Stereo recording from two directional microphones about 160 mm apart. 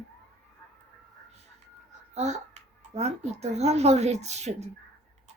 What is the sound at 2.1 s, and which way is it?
Speech, 45° right (ahead or behind).